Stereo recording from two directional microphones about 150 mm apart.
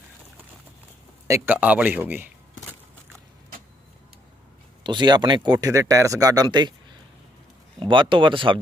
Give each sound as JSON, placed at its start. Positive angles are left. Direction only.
{"t": 1.3, "sound": "speech", "side_deg": -10}
{"t": 4.8, "sound": "speech", "side_deg": -30}
{"t": 7.8, "sound": "speech", "side_deg": -35}